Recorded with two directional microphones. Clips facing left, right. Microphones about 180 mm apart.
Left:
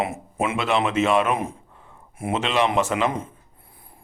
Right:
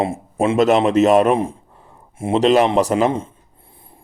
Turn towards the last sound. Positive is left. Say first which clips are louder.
# right 6 dB
turn(degrees=-40)  # may be behind; listen again after turning